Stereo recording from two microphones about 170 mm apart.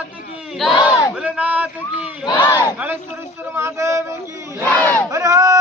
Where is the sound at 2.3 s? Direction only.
20° left (ahead or behind).